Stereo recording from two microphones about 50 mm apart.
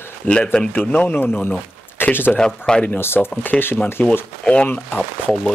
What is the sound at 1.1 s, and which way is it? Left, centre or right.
Speech, left.